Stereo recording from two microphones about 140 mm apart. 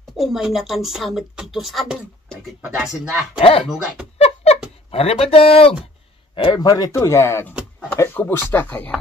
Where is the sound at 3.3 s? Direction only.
40° left (ahead or behind).